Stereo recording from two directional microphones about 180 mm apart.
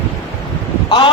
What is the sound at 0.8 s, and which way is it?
Speech, 25° left (ahead or behind).